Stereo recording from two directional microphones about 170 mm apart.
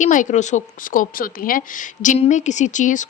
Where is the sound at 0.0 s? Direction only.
50° left (ahead or behind).